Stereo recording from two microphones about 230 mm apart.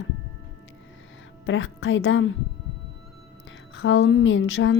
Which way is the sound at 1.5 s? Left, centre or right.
Left.